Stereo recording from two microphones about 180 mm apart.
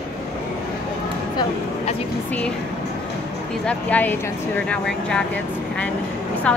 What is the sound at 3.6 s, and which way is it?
Speech, 10° left (ahead or behind).